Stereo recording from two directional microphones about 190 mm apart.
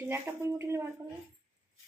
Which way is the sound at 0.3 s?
15° right (ahead or behind).